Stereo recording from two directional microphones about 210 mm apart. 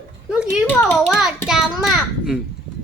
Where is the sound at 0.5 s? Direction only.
Centre (ahead or behind).